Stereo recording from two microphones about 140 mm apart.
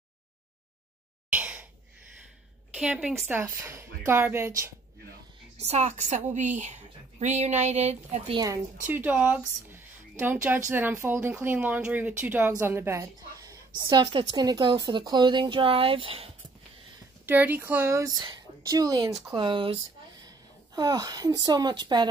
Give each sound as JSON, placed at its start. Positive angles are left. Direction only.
{"t": 1.3, "sound": "a sound", "side_deg": -10}
{"t": 2.7, "sound": "a woman's voice", "side_deg": -5}
{"t": 3.3, "sound": "a woman's voice", "side_deg": -15}
{"t": 5.6, "sound": "speech", "side_deg": -50}
{"t": 8.8, "sound": "speech", "side_deg": -15}
{"t": 17.3, "sound": "a woman's voice", "side_deg": -15}